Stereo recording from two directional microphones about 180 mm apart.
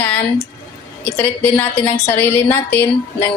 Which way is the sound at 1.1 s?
10° left (ahead or behind).